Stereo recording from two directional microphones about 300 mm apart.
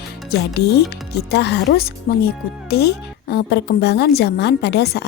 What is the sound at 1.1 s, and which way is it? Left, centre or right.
A woman's voice, left.